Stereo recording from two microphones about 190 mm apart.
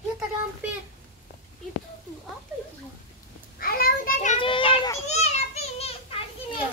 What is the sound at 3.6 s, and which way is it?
Children playing, 50° left (ahead or behind).